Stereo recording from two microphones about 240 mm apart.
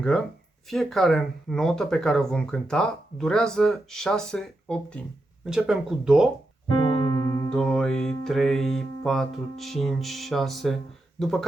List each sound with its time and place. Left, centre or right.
0.7 s speech: centre
6.7 s music: centre
7.5 s speech: centre